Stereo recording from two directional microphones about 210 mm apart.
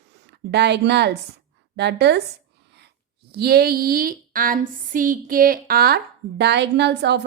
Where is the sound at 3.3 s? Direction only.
50° right (ahead or behind).